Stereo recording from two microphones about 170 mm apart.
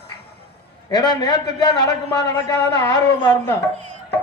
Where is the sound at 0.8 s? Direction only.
25° left (ahead or behind).